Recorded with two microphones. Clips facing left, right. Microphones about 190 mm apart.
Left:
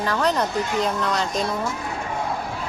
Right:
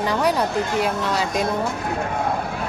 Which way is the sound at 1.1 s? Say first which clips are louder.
Right 2 dB; 5° right (ahead or behind).